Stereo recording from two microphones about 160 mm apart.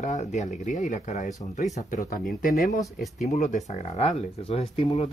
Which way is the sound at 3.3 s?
50° left (ahead or behind).